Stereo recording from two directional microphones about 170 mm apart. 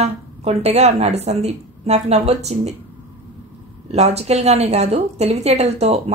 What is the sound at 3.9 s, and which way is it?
A woman's voice, 40° right (ahead or behind).